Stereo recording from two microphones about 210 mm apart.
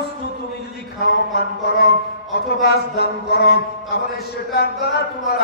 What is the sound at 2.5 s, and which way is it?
Music, 50° left (ahead or behind).